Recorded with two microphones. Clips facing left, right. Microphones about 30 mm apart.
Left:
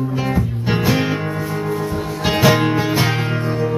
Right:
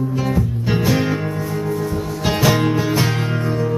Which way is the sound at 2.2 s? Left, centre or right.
Centre.